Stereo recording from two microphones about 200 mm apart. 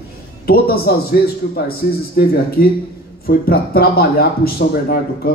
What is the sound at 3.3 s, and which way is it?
Speech, 50° left (ahead or behind).